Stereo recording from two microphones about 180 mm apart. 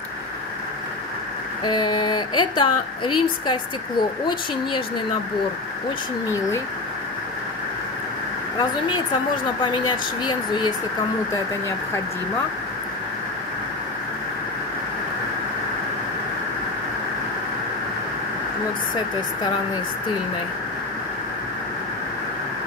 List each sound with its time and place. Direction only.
1.6 s speech: 25° left (ahead or behind)
9.7 s speech: 25° left (ahead or behind)